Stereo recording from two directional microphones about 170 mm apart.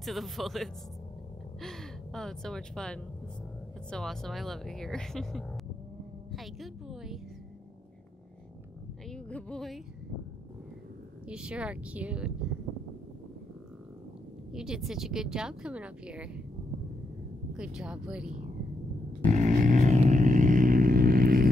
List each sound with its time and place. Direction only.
0.0 s a woman's voice: centre (ahead or behind)
6.3 s a sound: centre (ahead or behind)
9.1 s speech: 5° left (ahead or behind)
11.2 s speech: 5° right (ahead or behind)
14.5 s speech: 5° right (ahead or behind)
17.6 s speech: 5° right (ahead or behind)
19.2 s vehicle: 45° right (ahead or behind)